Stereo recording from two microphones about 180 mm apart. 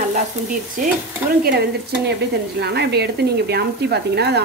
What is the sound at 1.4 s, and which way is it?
Speech, 60° right (ahead or behind).